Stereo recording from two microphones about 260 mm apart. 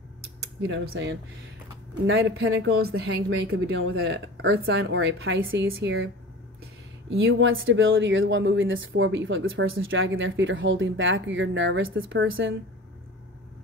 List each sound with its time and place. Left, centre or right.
0.7 s speech: right
7.1 s speech: right